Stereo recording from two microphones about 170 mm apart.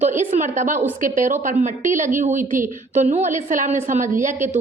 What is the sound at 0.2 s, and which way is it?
A woman's voice, 50° right (ahead or behind).